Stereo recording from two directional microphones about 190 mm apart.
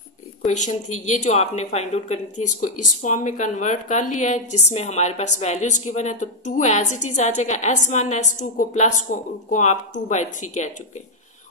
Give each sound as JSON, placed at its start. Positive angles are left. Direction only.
{"t": 0.5, "sound": "a woman's voice", "side_deg": 40}